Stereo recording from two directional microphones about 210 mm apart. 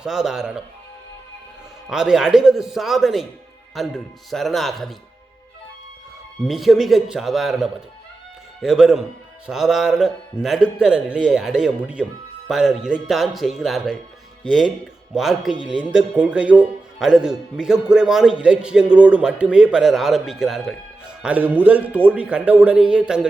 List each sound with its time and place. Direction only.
0.0 s speech: centre (ahead or behind)
1.9 s speech: centre (ahead or behind)
6.4 s speech: centre (ahead or behind)
15.1 s a man's voice: centre (ahead or behind)